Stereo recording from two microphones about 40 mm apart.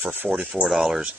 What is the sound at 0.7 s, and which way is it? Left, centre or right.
Speech, centre.